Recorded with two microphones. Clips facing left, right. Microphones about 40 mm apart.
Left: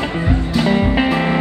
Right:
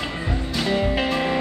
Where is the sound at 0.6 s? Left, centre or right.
Left.